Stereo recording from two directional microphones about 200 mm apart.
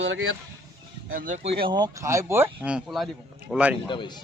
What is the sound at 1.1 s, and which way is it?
Speech, 40° right (ahead or behind).